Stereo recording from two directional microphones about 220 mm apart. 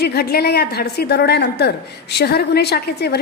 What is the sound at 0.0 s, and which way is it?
A woman's voice, 45° left (ahead or behind).